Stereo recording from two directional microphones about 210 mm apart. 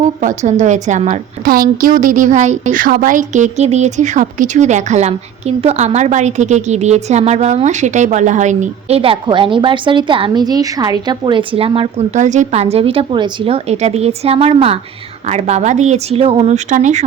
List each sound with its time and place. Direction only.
0.2 s a woman's voice: 35° right (ahead or behind)